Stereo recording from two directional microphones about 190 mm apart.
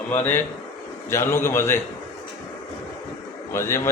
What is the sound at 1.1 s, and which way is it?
Speech, 15° left (ahead or behind).